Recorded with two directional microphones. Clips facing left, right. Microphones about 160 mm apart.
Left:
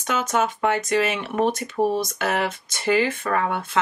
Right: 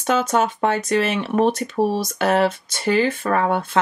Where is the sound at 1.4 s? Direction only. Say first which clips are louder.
Right 2 dB; 30° right (ahead or behind).